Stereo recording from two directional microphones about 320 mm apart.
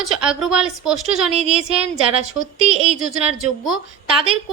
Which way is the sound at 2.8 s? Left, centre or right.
Centre.